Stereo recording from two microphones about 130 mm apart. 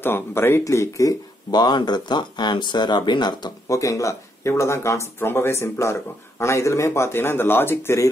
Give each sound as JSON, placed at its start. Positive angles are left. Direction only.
{"t": 0.0, "sound": "speech", "side_deg": 15}